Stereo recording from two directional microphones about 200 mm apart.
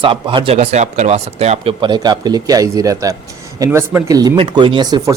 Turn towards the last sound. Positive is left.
turn(degrees=-20)  # may be behind; listen again after turning